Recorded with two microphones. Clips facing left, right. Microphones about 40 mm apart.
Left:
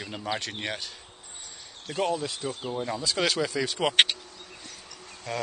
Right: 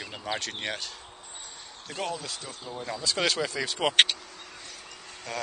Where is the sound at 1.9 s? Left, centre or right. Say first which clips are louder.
Left 6 dB; centre.